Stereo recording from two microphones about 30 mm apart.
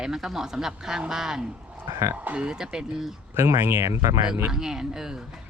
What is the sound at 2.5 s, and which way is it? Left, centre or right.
Speech, right.